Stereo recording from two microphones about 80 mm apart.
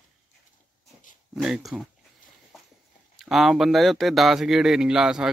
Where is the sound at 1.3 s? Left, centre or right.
Centre.